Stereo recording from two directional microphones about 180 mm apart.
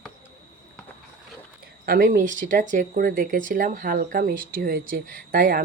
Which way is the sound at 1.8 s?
55° right (ahead or behind).